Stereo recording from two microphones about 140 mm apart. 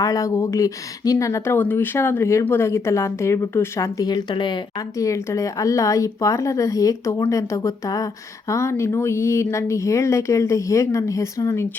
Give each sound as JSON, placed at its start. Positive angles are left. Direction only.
{"t": 0.0, "sound": "speech", "side_deg": 25}
{"t": 4.9, "sound": "speech", "side_deg": 20}